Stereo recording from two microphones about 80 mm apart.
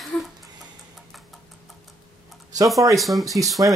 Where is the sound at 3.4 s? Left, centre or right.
Right.